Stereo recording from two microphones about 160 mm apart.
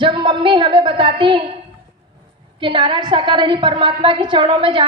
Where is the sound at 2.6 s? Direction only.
30° right (ahead or behind).